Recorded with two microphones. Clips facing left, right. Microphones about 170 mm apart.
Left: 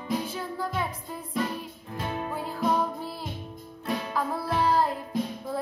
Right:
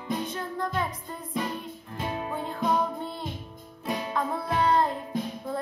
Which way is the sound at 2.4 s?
5° left (ahead or behind).